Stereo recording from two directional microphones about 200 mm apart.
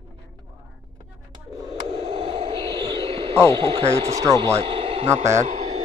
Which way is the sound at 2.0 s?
25° right (ahead or behind).